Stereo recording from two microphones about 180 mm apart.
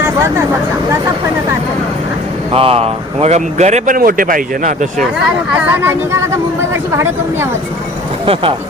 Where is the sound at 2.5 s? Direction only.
30° right (ahead or behind).